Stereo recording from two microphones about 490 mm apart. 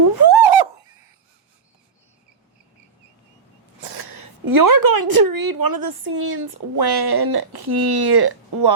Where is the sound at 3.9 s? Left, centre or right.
Right.